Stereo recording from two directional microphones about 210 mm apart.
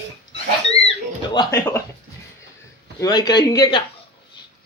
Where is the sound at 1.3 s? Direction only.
15° left (ahead or behind).